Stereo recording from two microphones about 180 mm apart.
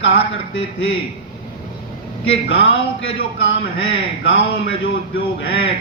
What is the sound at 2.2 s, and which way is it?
A man's voice, 90° left.